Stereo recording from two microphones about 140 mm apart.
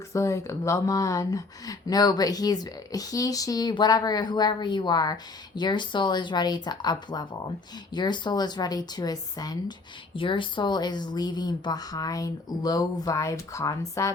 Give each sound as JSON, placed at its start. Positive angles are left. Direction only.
{"t": 0.1, "sound": "speech", "side_deg": 20}